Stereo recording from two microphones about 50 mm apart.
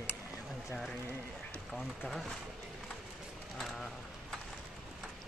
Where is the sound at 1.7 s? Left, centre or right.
Centre.